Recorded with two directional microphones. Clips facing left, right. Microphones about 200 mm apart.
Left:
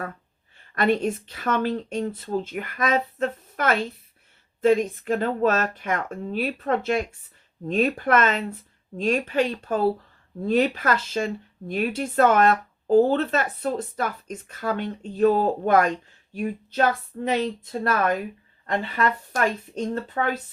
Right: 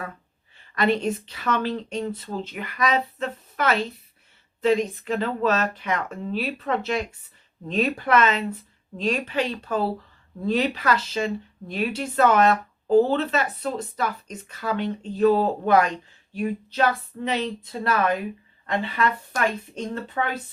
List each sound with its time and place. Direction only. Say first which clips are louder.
0.5 s speech: left 1 dB; 50° left (ahead or behind)